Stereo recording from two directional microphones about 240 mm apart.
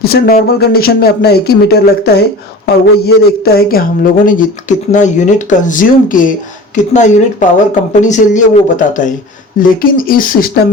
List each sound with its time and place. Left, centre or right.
0.0 s speech: left